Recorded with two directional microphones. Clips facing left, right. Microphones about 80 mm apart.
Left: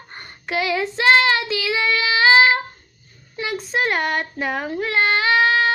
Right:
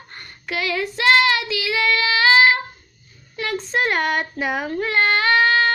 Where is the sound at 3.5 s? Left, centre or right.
Centre.